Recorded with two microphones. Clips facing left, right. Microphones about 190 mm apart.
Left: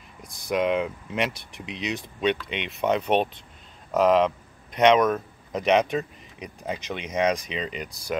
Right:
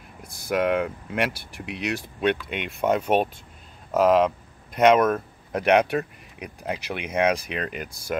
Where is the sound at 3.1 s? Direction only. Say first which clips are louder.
Right 1 dB; 5° right (ahead or behind).